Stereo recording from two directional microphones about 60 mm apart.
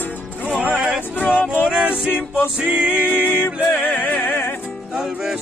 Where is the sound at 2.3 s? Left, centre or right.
Left.